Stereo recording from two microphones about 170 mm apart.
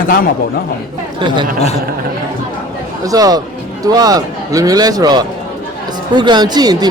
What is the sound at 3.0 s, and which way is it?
Speech, 20° right (ahead or behind).